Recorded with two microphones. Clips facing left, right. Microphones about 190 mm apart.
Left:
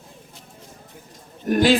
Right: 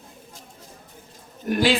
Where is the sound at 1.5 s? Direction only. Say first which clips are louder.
Left 4 dB; 45° left (ahead or behind).